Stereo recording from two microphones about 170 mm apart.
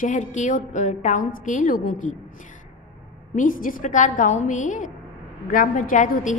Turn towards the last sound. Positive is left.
turn(degrees=50)  # may be behind; listen again after turning